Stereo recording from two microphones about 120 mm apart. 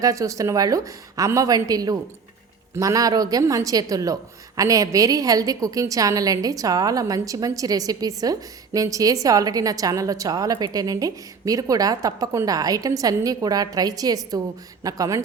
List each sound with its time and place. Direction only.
0.0 s a woman's voice: 25° right (ahead or behind)